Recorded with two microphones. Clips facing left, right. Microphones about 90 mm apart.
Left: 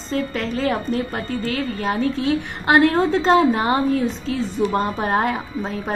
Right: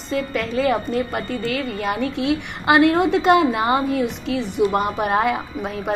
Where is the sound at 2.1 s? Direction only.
85° right.